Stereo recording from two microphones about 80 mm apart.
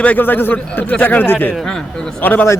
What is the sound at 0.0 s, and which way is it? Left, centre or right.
Speech, left.